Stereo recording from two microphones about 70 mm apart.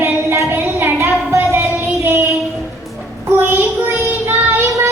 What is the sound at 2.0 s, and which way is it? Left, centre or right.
Child singing, right.